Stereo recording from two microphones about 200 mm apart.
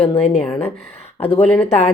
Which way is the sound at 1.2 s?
30° left (ahead or behind).